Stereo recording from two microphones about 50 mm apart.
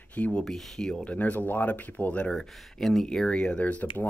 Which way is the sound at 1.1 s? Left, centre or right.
Left.